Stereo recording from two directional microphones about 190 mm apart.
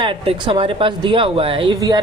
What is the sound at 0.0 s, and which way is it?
Speech, 25° right (ahead or behind).